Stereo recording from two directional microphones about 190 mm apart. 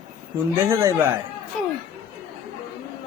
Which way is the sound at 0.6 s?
15° right (ahead or behind).